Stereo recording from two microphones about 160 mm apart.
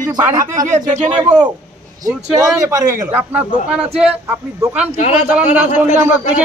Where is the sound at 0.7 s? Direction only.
50° right (ahead or behind).